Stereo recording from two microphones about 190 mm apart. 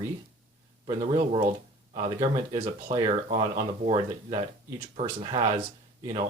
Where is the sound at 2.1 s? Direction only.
15° right (ahead or behind).